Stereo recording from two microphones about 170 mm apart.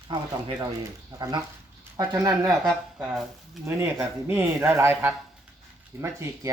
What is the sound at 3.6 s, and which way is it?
Speech, 10° right (ahead or behind).